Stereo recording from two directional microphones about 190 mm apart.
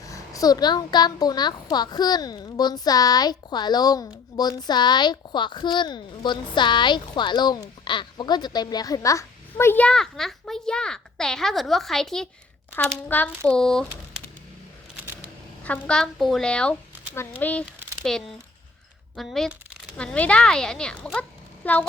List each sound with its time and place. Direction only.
0.0 s a child's voice: 15° left (ahead or behind)
15.6 s speech: 5° left (ahead or behind)